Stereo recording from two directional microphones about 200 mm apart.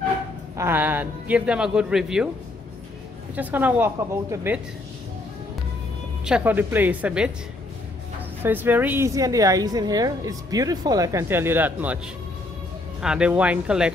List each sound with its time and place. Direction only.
0.6 s a man's voice: 10° right (ahead or behind)
3.3 s a woman's voice: 10° right (ahead or behind)
6.2 s a woman's voice: 5° right (ahead or behind)
8.4 s a woman's voice: 10° right (ahead or behind)
13.0 s a man's voice: 5° right (ahead or behind)